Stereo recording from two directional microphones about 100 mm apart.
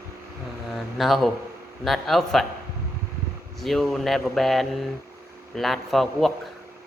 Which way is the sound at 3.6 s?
Centre (ahead or behind).